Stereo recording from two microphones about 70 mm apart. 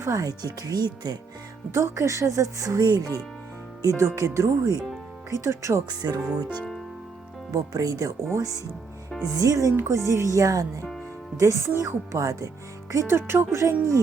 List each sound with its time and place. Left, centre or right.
0.0 s speech: right
1.7 s speech: right
3.8 s speech: right
6.0 s speech: right
7.5 s speech: right
9.7 s speech: right